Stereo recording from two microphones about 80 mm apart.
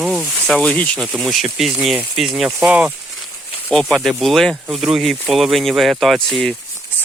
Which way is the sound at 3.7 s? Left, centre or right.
Centre.